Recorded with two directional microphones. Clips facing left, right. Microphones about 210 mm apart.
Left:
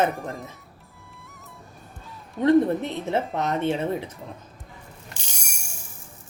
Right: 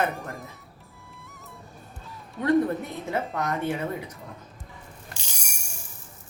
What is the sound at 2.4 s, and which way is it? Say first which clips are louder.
Speech: left 4 dB; 25° left (ahead or behind).